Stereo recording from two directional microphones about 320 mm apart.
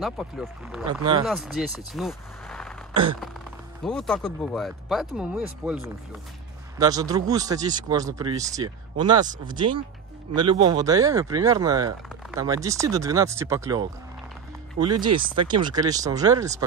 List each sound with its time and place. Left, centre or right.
0.0 s speech: centre
2.9 s gasp: centre
3.8 s speech: centre